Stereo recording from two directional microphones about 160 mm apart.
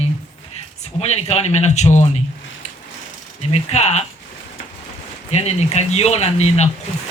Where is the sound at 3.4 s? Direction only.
40° left (ahead or behind).